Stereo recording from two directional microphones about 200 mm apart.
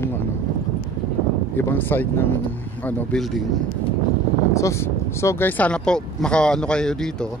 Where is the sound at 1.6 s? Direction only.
10° left (ahead or behind).